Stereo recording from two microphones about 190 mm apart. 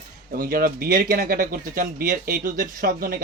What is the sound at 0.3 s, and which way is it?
A man's voice, 50° right (ahead or behind).